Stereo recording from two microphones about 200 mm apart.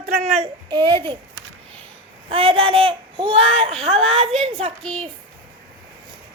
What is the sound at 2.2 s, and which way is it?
A woman's voice, 30° right (ahead or behind).